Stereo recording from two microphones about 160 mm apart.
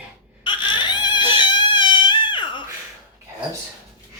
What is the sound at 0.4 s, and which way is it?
Crying, 30° left (ahead or behind).